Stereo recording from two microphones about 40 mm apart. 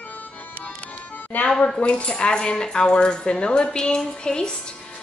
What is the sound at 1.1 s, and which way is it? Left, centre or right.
Music, left.